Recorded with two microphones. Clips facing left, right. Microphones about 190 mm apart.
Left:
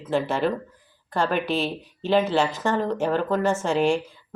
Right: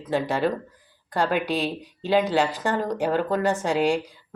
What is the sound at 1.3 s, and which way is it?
Speech, 15° right (ahead or behind).